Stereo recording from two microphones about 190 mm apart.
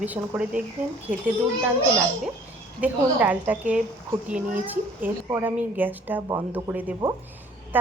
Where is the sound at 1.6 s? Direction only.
10° right (ahead or behind).